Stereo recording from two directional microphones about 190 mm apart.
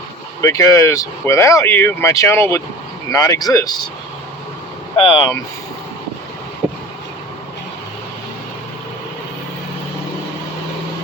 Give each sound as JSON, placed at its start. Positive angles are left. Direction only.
{"t": 0.4, "sound": "speech", "side_deg": 15}
{"t": 4.9, "sound": "speech", "side_deg": 25}